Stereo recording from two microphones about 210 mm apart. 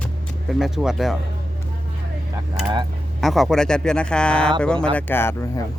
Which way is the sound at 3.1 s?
Centre (ahead or behind).